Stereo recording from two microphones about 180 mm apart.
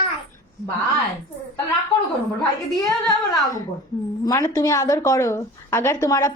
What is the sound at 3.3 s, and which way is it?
A woman's voice, 20° left (ahead or behind).